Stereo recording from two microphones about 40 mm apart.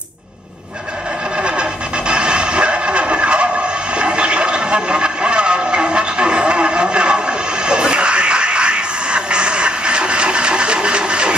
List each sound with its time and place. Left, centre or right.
1.4 s vehicle: right